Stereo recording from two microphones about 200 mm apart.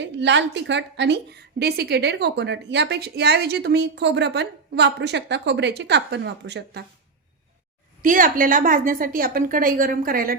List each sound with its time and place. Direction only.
0.0 s a woman's voice: 65° right (ahead or behind)
8.0 s a woman's voice: 45° right (ahead or behind)